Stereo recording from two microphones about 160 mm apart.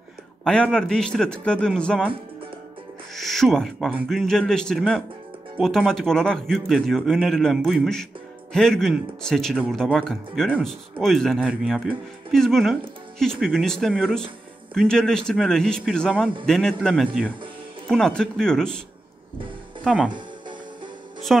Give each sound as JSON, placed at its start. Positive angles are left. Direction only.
{"t": 0.4, "sound": "a man's voice", "side_deg": 5}
{"t": 3.2, "sound": "owl", "side_deg": 0}
{"t": 4.1, "sound": "a man's voice", "side_deg": 0}
{"t": 20.1, "sound": "music", "side_deg": -30}
{"t": 21.3, "sound": "speech", "side_deg": 0}